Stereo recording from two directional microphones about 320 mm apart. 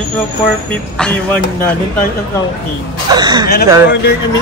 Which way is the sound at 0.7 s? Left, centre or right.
Centre.